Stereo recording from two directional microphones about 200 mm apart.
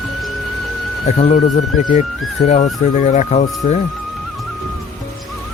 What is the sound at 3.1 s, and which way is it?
Speech, 35° left (ahead or behind).